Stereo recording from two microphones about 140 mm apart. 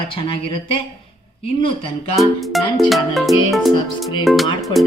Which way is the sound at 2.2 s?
Centre (ahead or behind).